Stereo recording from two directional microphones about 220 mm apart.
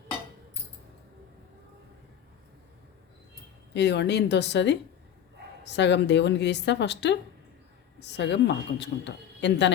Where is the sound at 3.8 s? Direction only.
50° left (ahead or behind).